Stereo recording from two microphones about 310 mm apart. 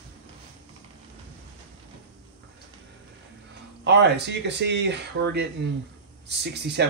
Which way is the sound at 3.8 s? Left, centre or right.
Right.